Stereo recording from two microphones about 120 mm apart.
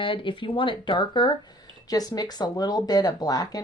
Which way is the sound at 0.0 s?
45° left (ahead or behind).